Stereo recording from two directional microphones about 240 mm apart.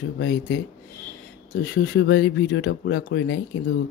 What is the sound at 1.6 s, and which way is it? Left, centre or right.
Speech, left.